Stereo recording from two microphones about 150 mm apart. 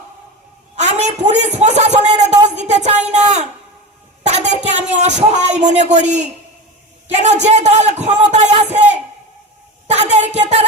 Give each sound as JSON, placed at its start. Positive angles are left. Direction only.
{"t": 0.8, "sound": "a man's voice", "side_deg": -50}
{"t": 4.2, "sound": "a sound", "side_deg": -50}
{"t": 7.1, "sound": "speech", "side_deg": -50}
{"t": 9.9, "sound": "music", "side_deg": -50}